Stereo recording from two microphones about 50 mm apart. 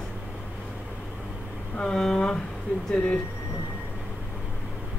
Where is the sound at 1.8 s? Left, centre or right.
Centre.